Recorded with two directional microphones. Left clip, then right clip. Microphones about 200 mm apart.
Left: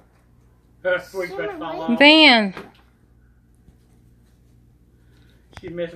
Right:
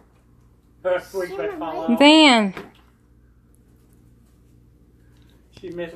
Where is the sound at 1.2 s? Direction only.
Centre (ahead or behind).